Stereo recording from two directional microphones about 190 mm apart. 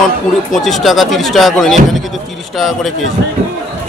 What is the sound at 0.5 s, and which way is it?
Speech, centre (ahead or behind).